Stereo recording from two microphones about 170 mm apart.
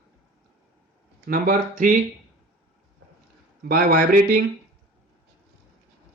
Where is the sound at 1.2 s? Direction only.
55° right (ahead or behind).